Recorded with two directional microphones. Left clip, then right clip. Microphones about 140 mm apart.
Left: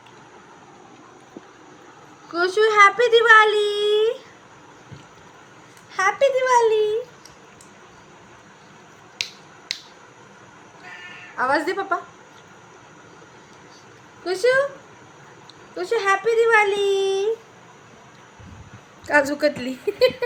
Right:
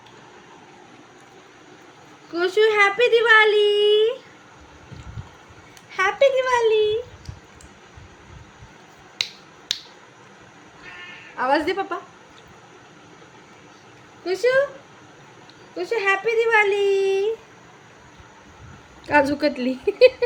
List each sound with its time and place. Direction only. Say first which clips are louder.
2.3 s a child's voice: left 1 dB; 30° right (ahead or behind)
5.9 s a sound: right 1 dB; 45° right (ahead or behind)
11.3 s a woman's voice: even; 40° right (ahead or behind)
14.3 s a child's voice: even; 30° right (ahead or behind)
15.7 s a child's voice: left 1 dB; 30° right (ahead or behind)
19.0 s a woman's voice: even; 70° right (ahead or behind)